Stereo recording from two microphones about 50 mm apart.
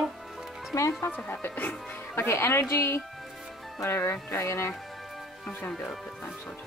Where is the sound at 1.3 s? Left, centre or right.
Left.